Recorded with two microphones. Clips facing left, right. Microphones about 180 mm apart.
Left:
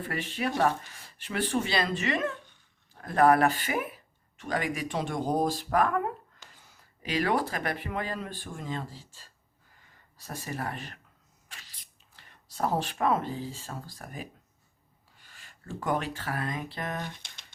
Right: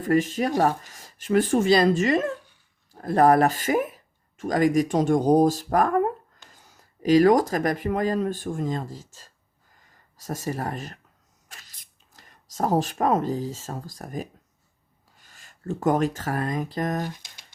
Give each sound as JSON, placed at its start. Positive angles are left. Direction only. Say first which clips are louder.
{"t": 0.0, "sound": "speech", "louder": "right 10 dB", "side_deg": -45}
{"t": 11.4, "sound": "a sound", "louder": "right 2 dB", "side_deg": -45}
{"t": 15.1, "sound": "speech", "louder": "right 1 dB", "side_deg": -45}